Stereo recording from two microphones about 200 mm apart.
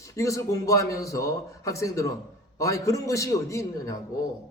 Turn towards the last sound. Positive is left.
turn(degrees=15)  # may be behind; listen again after turning